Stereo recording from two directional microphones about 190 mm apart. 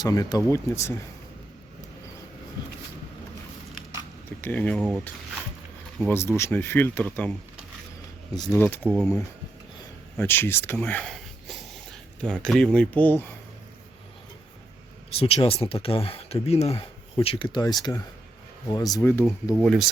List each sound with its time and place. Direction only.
0.0 s speech: 20° left (ahead or behind)
4.4 s speech: 10° left (ahead or behind)
8.5 s speech: 10° left (ahead or behind)
10.2 s speech: 10° left (ahead or behind)
15.2 s speech: 30° left (ahead or behind)
19.5 s speech: centre (ahead or behind)